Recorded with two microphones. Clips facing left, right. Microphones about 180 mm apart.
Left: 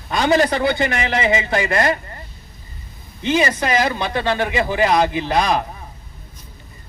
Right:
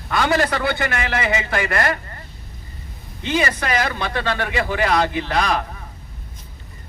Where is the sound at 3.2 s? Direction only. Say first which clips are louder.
Left 3 dB; 25° left (ahead or behind).